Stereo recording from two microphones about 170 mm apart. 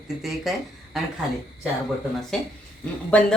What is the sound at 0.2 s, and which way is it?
Speech, centre (ahead or behind).